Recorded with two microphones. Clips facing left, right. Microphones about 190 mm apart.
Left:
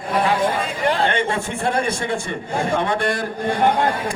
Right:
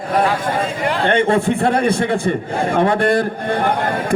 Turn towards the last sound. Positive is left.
turn(degrees=-55)  # may be behind; listen again after turning